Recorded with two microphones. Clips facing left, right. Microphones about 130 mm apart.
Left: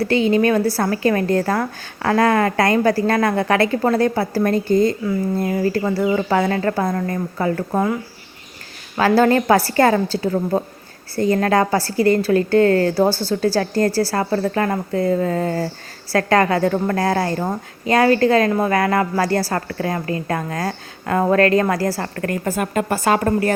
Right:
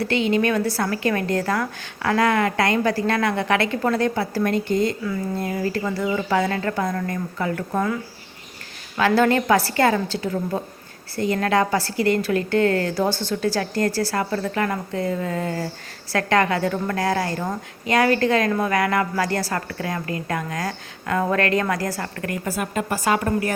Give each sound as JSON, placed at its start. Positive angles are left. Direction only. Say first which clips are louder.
{"t": 0.0, "sound": "a woman's voice", "louder": "left 4 dB", "side_deg": 35}
{"t": 9.0, "sound": "a woman's voice", "louder": "left 3 dB", "side_deg": 35}